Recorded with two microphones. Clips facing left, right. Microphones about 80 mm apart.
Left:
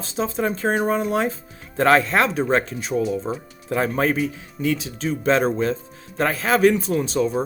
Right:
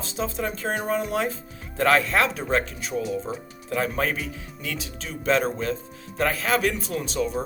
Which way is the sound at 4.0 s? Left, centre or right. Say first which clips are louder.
Left 6 dB; left.